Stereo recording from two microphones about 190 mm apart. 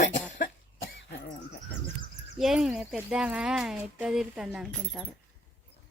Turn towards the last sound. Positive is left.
turn(degrees=-5)  # may be behind; listen again after turning